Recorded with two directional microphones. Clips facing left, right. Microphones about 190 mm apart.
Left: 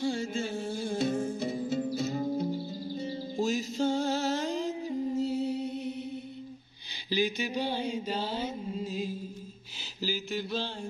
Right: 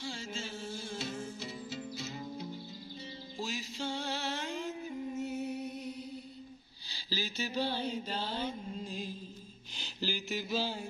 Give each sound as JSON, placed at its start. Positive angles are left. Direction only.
{"t": 0.0, "sound": "music", "side_deg": 55}
{"t": 7.1, "sound": "mantra", "side_deg": 15}